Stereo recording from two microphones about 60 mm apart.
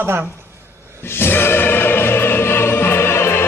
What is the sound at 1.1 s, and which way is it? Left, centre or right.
Music, left.